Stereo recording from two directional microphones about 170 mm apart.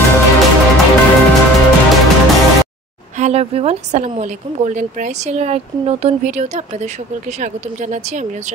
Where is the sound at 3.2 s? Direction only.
40° right (ahead or behind).